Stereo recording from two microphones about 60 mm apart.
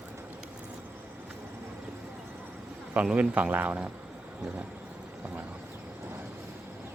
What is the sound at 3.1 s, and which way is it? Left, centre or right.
Speech, right.